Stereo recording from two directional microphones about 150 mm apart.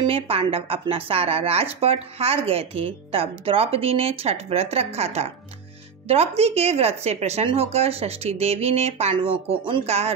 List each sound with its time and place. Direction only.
0.0 s a woman's voice: 40° right (ahead or behind)